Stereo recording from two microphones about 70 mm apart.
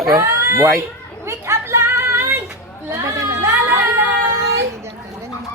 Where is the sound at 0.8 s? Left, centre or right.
Right.